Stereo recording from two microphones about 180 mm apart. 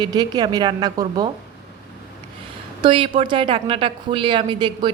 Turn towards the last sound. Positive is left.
turn(degrees=-25)  # may be behind; listen again after turning